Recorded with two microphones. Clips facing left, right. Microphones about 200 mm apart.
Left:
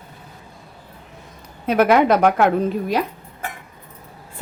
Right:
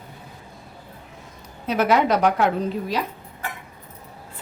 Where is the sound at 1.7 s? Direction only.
55° left (ahead or behind).